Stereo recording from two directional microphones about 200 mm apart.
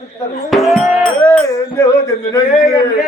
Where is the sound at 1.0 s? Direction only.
15° left (ahead or behind).